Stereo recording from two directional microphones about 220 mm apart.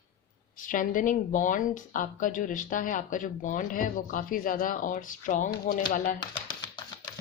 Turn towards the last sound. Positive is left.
turn(degrees=20)  # may be behind; listen again after turning